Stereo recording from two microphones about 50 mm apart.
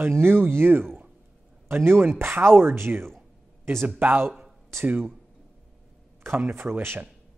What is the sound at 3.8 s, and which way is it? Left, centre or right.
Speech, right.